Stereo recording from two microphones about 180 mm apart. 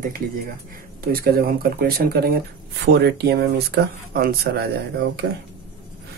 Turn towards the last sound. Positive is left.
turn(degrees=-65)  # may be behind; listen again after turning